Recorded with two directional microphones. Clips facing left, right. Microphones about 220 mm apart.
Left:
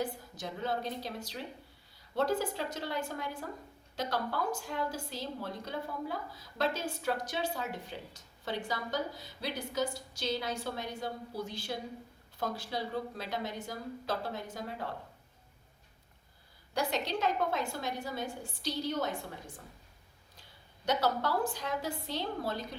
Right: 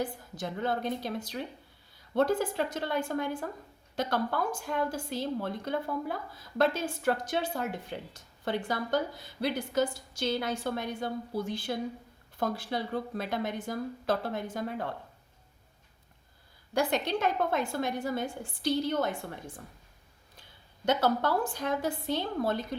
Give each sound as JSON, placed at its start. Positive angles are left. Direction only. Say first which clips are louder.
{"t": 0.3, "sound": "speech", "louder": "right 4 dB", "side_deg": -55}
{"t": 16.7, "sound": "speech", "louder": "right 5 dB", "side_deg": -55}
{"t": 20.8, "sound": "speech", "louder": "right 4 dB", "side_deg": -50}